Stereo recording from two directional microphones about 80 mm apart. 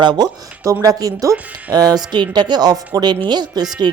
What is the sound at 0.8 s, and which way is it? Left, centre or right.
Speech, right.